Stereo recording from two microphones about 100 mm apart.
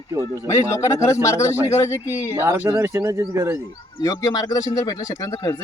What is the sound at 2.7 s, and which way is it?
Speech, 30° right (ahead or behind).